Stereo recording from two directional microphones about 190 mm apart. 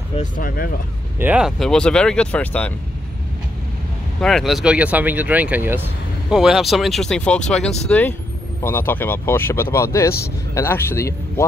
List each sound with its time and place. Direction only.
0.1 s speech: 45° left (ahead or behind)
1.2 s speech: 5° right (ahead or behind)
4.2 s speech: centre (ahead or behind)